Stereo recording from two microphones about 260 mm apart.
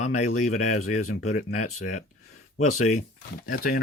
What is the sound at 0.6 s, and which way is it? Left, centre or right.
Speech, left.